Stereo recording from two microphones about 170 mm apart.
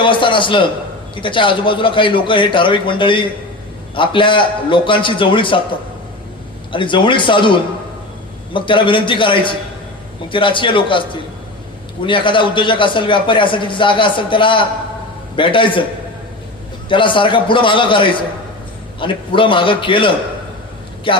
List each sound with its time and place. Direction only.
0.0 s a man's voice: 30° left (ahead or behind)
6.7 s a man's voice: 30° left (ahead or behind)
12.0 s a man's voice: 30° left (ahead or behind)
16.9 s a man's voice: 30° left (ahead or behind)